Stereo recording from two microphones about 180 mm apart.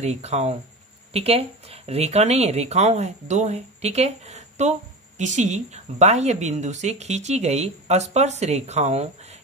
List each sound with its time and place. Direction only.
0.0 s speech: 35° right (ahead or behind)